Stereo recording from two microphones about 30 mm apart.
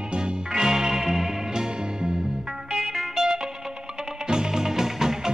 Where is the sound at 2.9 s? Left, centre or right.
Centre.